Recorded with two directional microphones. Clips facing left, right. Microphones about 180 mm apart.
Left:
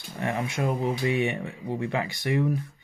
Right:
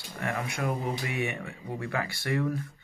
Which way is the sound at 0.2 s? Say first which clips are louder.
Left 4 dB; 25° left (ahead or behind).